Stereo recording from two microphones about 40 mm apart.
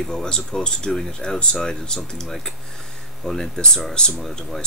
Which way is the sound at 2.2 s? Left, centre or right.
Centre.